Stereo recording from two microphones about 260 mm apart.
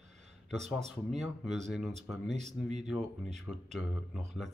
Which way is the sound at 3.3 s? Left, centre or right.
Centre.